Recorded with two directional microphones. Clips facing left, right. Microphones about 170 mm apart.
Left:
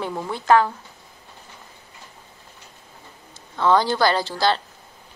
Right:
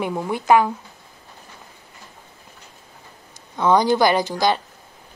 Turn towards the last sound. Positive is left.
turn(degrees=-15)  # may be behind; listen again after turning